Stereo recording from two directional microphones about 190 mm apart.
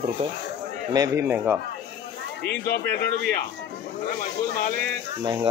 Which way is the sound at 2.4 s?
60° left (ahead or behind).